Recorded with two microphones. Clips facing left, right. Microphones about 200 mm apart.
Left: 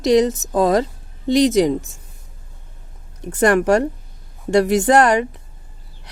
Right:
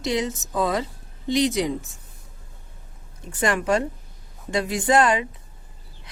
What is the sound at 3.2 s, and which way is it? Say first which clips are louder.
A woman's voice: left 9 dB; 70° left (ahead or behind).